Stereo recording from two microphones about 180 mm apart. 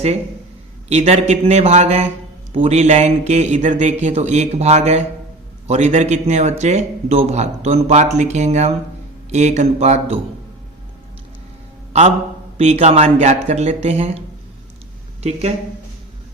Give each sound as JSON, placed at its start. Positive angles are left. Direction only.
{"t": 0.9, "sound": "a man's voice", "side_deg": -35}
{"t": 12.5, "sound": "a man's voice", "side_deg": -35}
{"t": 15.2, "sound": "a man's voice", "side_deg": -35}